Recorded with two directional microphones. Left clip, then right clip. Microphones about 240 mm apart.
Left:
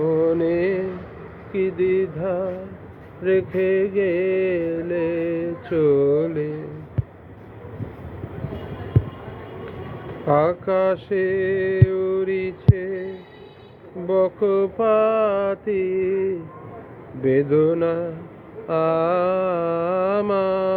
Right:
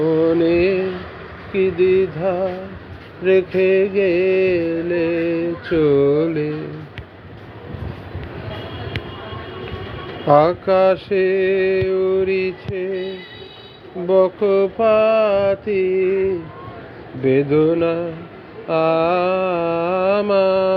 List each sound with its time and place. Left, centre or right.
0.0 s mantra: right
1.5 s music: right
10.2 s a sound: right
14.1 s music: right
18.7 s mantra: centre